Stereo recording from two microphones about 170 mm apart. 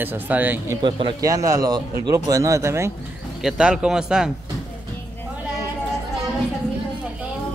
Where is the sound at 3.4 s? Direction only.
5° right (ahead or behind).